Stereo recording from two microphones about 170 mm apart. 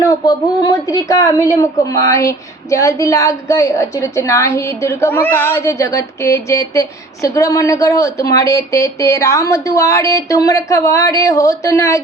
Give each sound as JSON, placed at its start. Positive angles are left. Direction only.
{"t": 0.0, "sound": "speech", "side_deg": 20}